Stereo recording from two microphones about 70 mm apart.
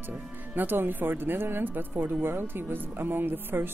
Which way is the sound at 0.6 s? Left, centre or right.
Right.